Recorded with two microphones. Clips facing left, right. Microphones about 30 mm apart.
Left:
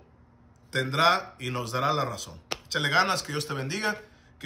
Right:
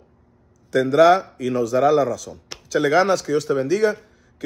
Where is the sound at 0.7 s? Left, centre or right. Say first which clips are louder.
Right 9 dB; left.